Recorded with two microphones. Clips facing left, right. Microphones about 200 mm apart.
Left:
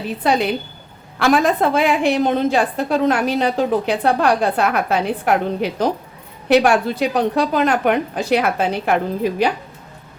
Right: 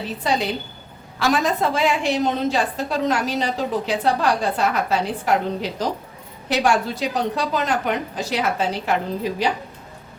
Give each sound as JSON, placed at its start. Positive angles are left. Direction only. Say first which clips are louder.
{"t": 0.2, "sound": "a woman's voice", "louder": "left 5 dB", "side_deg": 60}